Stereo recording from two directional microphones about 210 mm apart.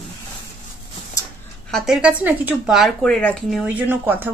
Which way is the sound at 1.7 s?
Centre (ahead or behind).